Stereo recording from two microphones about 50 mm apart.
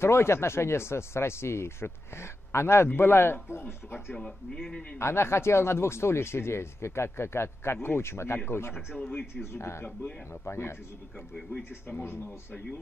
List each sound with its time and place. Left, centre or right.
0.0 s speech: left
11.5 s speech: left